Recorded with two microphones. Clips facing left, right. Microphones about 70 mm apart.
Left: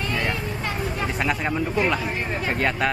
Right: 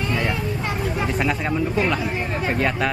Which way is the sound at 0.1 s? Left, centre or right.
Centre.